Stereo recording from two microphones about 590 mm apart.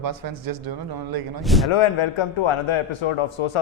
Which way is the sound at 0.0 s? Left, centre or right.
Right.